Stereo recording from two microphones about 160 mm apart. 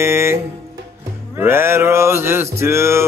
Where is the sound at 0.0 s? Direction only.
15° right (ahead or behind).